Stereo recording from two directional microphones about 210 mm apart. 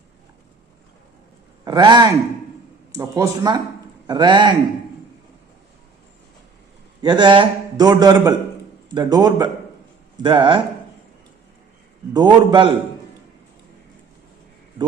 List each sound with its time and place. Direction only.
1.6 s a man's voice: 20° right (ahead or behind)
7.0 s a man's voice: 20° right (ahead or behind)
12.1 s a man's voice: 20° right (ahead or behind)